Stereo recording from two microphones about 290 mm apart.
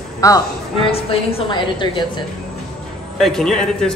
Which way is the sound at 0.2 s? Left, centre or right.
Centre.